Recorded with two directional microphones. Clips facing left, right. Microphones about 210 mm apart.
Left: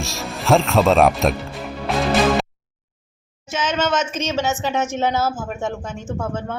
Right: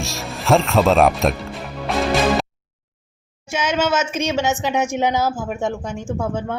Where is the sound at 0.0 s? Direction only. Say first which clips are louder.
Even; centre (ahead or behind).